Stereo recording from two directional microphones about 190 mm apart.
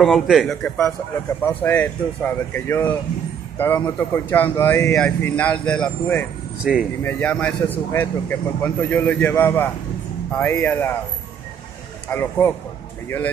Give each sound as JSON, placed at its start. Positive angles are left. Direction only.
{"t": 0.0, "sound": "a man's voice", "side_deg": 0}
{"t": 6.6, "sound": "a man's voice", "side_deg": -5}
{"t": 7.0, "sound": "speech", "side_deg": 10}
{"t": 12.1, "sound": "speech", "side_deg": 10}